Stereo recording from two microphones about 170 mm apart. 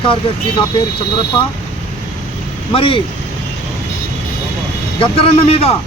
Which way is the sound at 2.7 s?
30° left (ahead or behind).